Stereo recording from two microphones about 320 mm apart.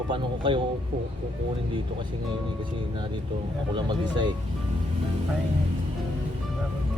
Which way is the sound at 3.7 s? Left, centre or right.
Centre.